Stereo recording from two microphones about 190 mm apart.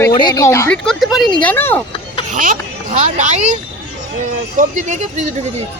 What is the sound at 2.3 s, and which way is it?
Speech, 45° right (ahead or behind).